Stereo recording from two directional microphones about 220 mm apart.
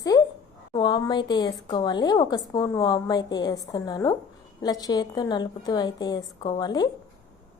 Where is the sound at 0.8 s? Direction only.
20° left (ahead or behind).